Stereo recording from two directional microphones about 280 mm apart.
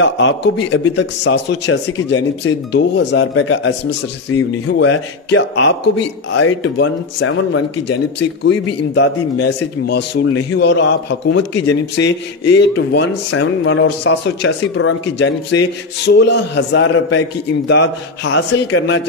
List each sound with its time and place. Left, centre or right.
0.0 s speech: left
4.7 s a man's voice: left
8.5 s speech: left